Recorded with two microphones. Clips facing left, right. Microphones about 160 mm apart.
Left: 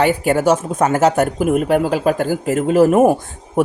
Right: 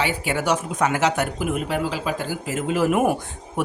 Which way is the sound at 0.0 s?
45° left (ahead or behind).